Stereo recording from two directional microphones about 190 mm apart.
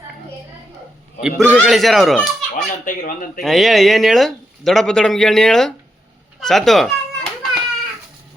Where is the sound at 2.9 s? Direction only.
45° left (ahead or behind).